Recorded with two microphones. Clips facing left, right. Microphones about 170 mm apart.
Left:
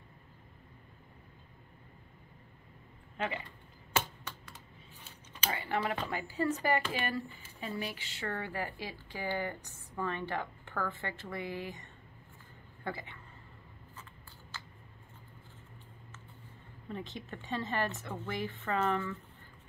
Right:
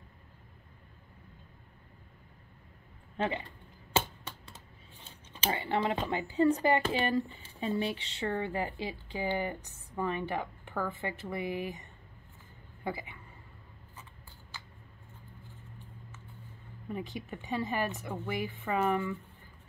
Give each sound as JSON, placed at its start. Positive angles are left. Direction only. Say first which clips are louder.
{"t": 3.2, "sound": "speech", "louder": "right 4 dB", "side_deg": -30}
{"t": 5.3, "sound": "a woman's voice", "louder": "right 3 dB", "side_deg": -25}
{"t": 16.9, "sound": "speech", "louder": "right 3 dB", "side_deg": -15}